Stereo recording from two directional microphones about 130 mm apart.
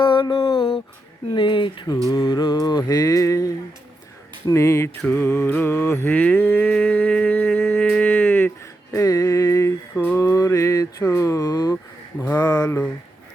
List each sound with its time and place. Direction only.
0.1 s a sound: 40° left (ahead or behind)
1.3 s speech: 40° left (ahead or behind)
2.0 s music: 25° left (ahead or behind)
4.4 s mantra: 20° left (ahead or behind)
6.7 s humming: centre (ahead or behind)
6.9 s a sound: 10° left (ahead or behind)
9.9 s mantra: 15° left (ahead or behind); by 11.8 s 30° left (ahead or behind)
12.2 s mantra: 15° left (ahead or behind)
12.5 s music: 30° left (ahead or behind)